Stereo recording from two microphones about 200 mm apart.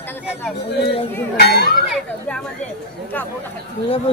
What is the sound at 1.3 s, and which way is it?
Speech, 55° left (ahead or behind).